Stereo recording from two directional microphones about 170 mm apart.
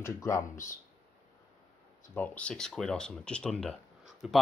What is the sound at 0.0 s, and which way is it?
Speech, 20° left (ahead or behind).